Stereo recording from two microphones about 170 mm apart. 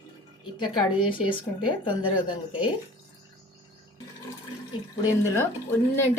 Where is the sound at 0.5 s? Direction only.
25° left (ahead or behind).